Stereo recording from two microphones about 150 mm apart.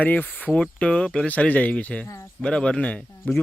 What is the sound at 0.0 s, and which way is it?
Speech, 10° left (ahead or behind).